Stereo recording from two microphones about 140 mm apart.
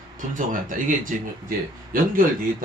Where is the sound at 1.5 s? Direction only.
90° right.